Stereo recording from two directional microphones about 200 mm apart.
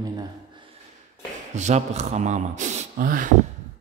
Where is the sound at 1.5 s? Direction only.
35° right (ahead or behind).